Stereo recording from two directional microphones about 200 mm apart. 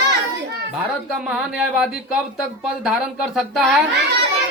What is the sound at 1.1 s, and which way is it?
Speech, centre (ahead or behind).